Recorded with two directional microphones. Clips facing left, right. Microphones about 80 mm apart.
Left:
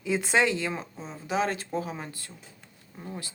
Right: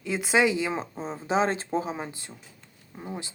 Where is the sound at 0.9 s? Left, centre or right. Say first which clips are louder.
Right 4 dB; right; by 3.3 s centre.